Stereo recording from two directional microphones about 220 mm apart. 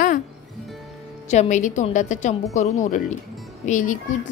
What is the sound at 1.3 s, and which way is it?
A woman's voice, 30° left (ahead or behind).